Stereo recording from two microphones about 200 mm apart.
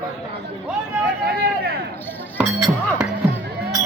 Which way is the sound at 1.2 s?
50° right (ahead or behind).